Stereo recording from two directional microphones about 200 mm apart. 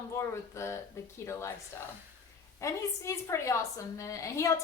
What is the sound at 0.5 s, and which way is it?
A woman's voice, 15° left (ahead or behind).